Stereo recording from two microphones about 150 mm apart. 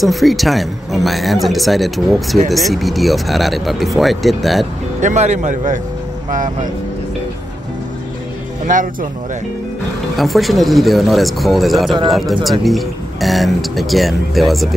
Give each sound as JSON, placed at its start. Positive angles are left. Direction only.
{"t": 0.0, "sound": "speech", "side_deg": 0}
{"t": 5.0, "sound": "speech", "side_deg": -50}
{"t": 8.7, "sound": "speech", "side_deg": -60}
{"t": 10.1, "sound": "speech", "side_deg": 0}